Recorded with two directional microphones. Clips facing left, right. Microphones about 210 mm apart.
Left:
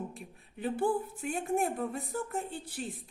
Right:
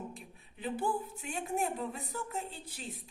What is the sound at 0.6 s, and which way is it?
A woman's voice, 50° left (ahead or behind).